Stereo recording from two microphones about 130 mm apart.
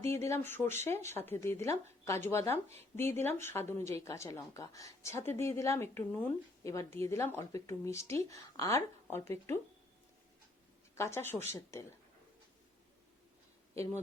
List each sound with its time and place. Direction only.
0.0 s speech: 20° left (ahead or behind)
10.9 s speech: 20° left (ahead or behind)